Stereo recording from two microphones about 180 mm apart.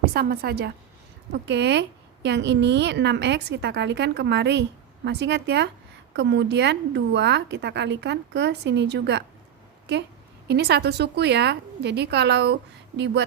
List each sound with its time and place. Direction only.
0.0 s a woman's voice: 60° right (ahead or behind)
1.3 s a woman's voice: 70° right (ahead or behind)
10.5 s a woman's voice: 65° right (ahead or behind)